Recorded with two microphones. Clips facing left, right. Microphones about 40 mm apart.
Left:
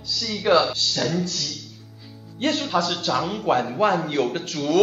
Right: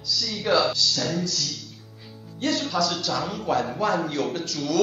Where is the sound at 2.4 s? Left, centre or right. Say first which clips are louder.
Left 2 dB; left.